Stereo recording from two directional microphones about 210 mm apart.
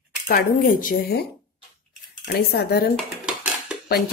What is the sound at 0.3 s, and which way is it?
Speech, 40° left (ahead or behind).